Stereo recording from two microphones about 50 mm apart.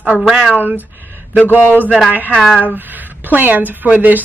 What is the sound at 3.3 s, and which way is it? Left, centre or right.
Speech, right.